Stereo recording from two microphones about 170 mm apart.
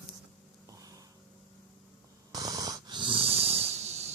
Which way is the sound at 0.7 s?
20° right (ahead or behind).